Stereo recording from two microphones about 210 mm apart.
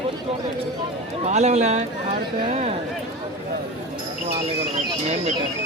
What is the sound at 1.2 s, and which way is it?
Speech, 30° right (ahead or behind).